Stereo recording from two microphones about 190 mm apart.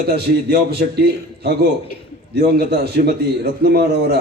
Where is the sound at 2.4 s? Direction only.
60° right (ahead or behind).